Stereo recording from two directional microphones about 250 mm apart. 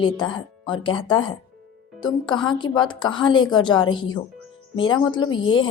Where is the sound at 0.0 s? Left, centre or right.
Centre.